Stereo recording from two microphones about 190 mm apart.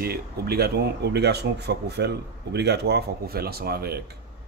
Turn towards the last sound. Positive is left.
turn(degrees=-55)  # may be behind; listen again after turning